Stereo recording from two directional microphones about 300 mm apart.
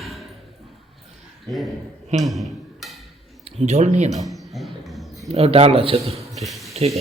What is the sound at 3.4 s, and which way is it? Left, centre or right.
Speech, right.